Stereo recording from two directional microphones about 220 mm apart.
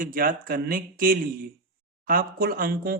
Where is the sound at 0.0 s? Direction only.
40° right (ahead or behind).